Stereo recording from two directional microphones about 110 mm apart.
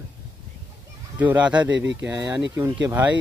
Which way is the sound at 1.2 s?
15° right (ahead or behind).